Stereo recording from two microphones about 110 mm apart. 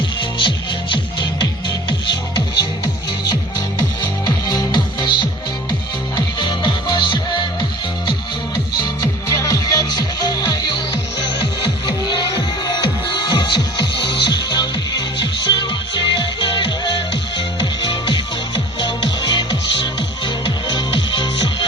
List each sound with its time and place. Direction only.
0.2 s music: 50° left (ahead or behind)
4.4 s music: 40° left (ahead or behind)
8.5 s music: 35° left (ahead or behind)